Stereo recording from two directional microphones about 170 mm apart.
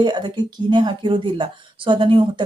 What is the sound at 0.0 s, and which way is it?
Speech, 25° right (ahead or behind).